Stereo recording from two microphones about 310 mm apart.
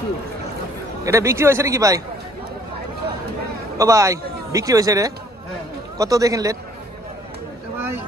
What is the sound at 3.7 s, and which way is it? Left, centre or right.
A man's voice, centre.